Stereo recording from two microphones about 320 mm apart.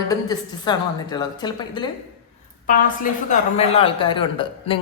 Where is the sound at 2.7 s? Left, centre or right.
Left.